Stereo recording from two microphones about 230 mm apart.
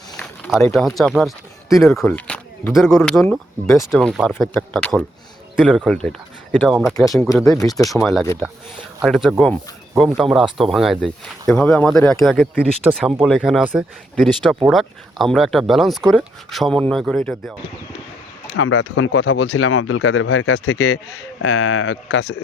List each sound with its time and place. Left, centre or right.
0.1 s speech: centre
18.5 s speech: left